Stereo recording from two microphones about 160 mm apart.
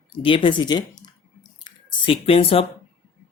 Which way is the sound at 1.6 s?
30° left (ahead or behind).